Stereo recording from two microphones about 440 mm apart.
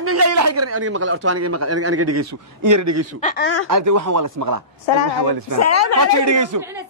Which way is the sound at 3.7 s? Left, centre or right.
Right.